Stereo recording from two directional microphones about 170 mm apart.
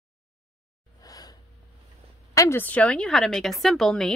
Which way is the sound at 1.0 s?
20° left (ahead or behind).